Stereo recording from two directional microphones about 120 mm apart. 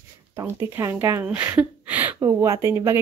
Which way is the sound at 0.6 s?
20° right (ahead or behind).